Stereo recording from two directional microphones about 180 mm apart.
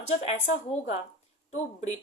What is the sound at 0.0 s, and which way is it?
Speech, 35° left (ahead or behind).